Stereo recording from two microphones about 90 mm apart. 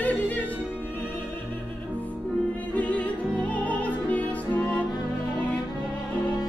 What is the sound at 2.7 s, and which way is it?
Music, 15° left (ahead or behind).